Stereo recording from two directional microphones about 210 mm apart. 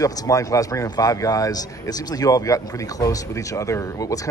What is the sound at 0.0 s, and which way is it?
Speech, 15° left (ahead or behind).